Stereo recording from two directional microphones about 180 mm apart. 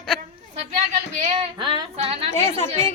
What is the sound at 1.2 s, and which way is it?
Female singing, 40° right (ahead or behind).